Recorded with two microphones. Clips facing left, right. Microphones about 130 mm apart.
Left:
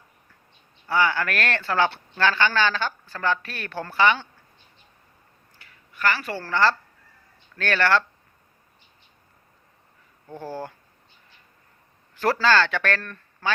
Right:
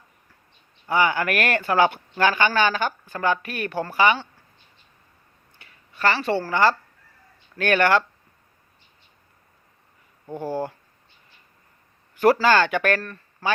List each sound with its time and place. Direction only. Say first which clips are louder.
0.9 s speech: right 2 dB; 15° right (ahead or behind)
5.5 s a sound: right 3 dB; 25° right (ahead or behind)
6.4 s speech: left 2 dB; 15° right (ahead or behind)
10.2 s speech: right 6 dB; 15° right (ahead or behind)
12.2 s speech: right 3 dB; 15° right (ahead or behind)